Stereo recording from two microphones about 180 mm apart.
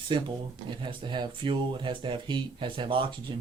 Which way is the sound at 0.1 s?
25° right (ahead or behind).